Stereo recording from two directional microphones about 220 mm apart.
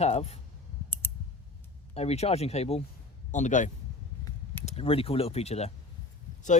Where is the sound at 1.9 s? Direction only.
30° left (ahead or behind).